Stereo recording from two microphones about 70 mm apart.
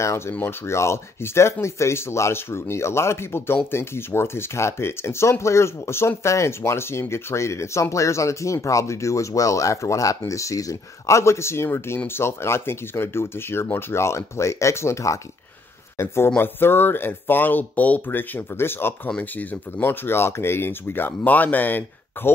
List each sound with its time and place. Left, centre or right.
0.3 s speech: left
19.0 s speech: left